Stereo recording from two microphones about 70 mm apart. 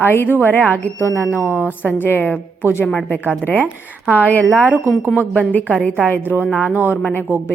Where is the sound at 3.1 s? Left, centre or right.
Left.